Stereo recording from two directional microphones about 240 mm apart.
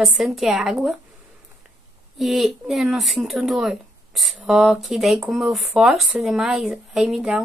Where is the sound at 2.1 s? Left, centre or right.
Centre.